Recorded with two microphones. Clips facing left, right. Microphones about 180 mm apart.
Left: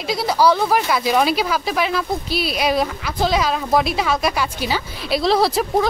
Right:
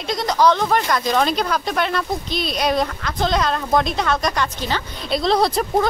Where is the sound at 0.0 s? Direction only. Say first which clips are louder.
Even; 5° left (ahead or behind).